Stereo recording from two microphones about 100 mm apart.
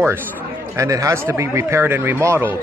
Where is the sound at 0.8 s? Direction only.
35° right (ahead or behind).